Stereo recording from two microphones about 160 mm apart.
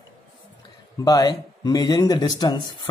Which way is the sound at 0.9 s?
25° left (ahead or behind).